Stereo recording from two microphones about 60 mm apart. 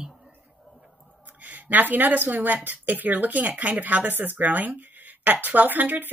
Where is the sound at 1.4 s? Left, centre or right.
Right.